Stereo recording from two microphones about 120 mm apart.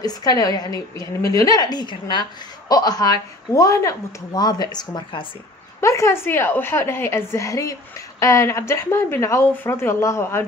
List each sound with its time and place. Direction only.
0.0 s speech: 30° left (ahead or behind)
5.8 s speech: 25° left (ahead or behind)